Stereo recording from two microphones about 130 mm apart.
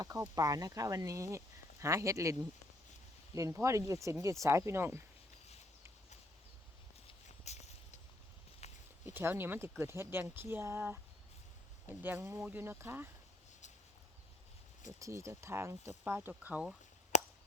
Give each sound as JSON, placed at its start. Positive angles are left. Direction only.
{"t": 0.0, "sound": "speech", "side_deg": -30}
{"t": 7.3, "sound": "walk", "side_deg": 60}
{"t": 9.0, "sound": "speech", "side_deg": -15}
{"t": 12.0, "sound": "speech", "side_deg": -20}
{"t": 14.8, "sound": "speech", "side_deg": -25}
{"t": 16.3, "sound": "speech", "side_deg": -10}
{"t": 17.1, "sound": "a sound", "side_deg": 60}